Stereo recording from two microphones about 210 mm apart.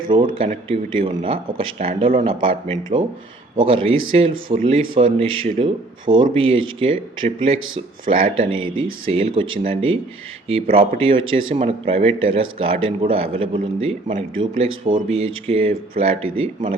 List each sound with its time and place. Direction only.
0.3 s speech: 30° right (ahead or behind)